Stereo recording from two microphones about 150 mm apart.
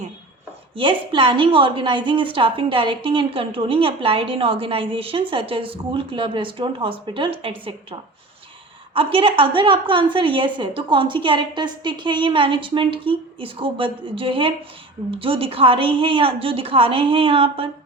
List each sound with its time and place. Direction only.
0.8 s a woman's voice: 35° right (ahead or behind)
9.0 s a woman's voice: 35° right (ahead or behind)